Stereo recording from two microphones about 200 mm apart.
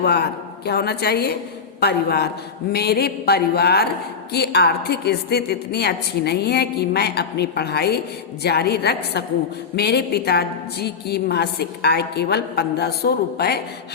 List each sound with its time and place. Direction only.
0.0 s a woman's voice: 55° left (ahead or behind)